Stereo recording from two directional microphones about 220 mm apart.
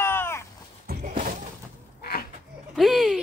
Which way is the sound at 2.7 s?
Centre (ahead or behind).